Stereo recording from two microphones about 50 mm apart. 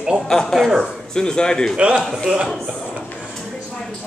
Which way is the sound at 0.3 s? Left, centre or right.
Centre.